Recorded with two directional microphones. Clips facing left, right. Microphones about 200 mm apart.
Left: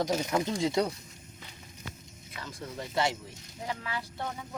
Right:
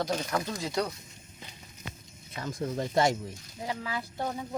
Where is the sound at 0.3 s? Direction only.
25° left (ahead or behind).